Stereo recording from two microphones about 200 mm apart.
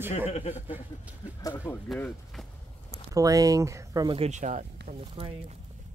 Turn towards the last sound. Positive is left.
turn(degrees=-30)  # may be behind; listen again after turning